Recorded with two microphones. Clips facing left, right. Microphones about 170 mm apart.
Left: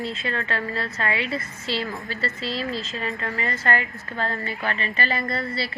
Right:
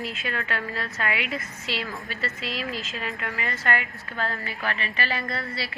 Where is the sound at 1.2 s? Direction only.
35° left (ahead or behind).